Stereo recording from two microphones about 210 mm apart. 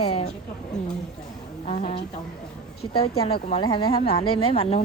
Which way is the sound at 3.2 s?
25° left (ahead or behind).